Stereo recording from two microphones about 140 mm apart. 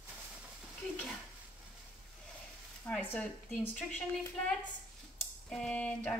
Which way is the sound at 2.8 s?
10° left (ahead or behind).